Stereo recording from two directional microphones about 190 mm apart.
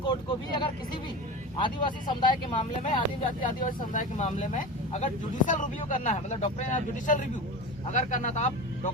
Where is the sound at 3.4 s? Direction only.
45° left (ahead or behind).